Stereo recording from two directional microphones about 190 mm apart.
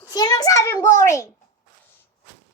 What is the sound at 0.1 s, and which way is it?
A child's voice, 20° left (ahead or behind).